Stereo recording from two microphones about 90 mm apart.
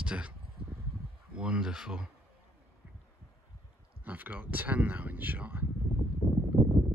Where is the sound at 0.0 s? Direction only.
15° right (ahead or behind).